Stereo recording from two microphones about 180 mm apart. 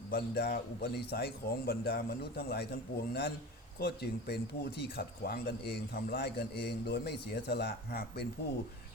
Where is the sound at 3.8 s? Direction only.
65° left (ahead or behind).